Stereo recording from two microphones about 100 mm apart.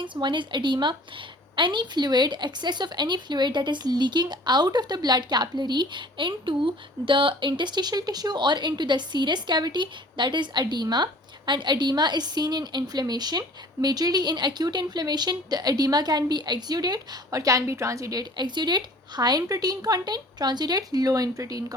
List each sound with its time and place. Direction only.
0.0 s a woman's voice: 50° right (ahead or behind); by 21.8 s 35° right (ahead or behind)